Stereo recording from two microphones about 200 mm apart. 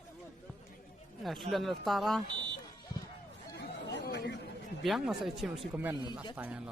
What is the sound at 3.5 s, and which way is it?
Chatter, 55° left (ahead or behind).